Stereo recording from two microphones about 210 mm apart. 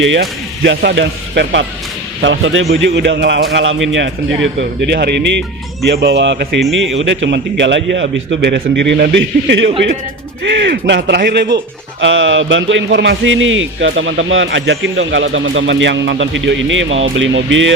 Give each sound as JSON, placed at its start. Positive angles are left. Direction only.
{"t": 0.0, "sound": "speech", "side_deg": -60}
{"t": 4.9, "sound": "speech", "side_deg": -50}